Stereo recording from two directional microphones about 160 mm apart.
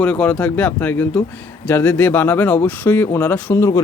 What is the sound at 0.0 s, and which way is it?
Speech, 10° left (ahead or behind).